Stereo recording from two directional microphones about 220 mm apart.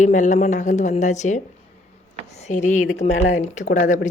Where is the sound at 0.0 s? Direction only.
35° left (ahead or behind).